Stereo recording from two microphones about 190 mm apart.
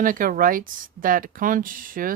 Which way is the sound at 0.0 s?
45° right (ahead or behind).